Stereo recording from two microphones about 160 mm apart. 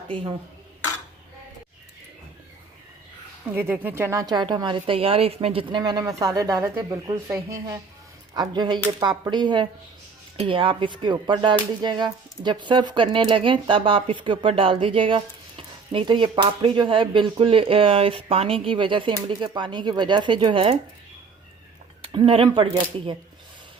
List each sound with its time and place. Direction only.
0.1 s speech: 30° right (ahead or behind)
3.5 s a woman's voice: 15° right (ahead or behind); by 20.7 s 35° right (ahead or behind)
22.0 s speech: 35° right (ahead or behind)